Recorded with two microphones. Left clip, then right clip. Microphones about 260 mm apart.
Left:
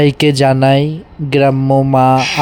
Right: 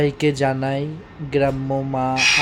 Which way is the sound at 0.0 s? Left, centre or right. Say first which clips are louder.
Left 8 dB; left.